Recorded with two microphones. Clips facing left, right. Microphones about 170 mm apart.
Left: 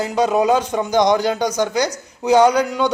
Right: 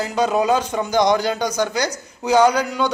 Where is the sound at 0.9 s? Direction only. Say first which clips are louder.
Left 1 dB; 5° right (ahead or behind).